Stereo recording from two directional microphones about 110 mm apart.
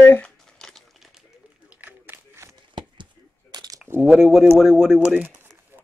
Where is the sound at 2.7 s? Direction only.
45° right (ahead or behind).